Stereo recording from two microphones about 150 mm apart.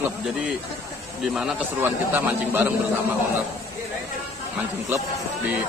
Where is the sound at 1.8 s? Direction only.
15° right (ahead or behind).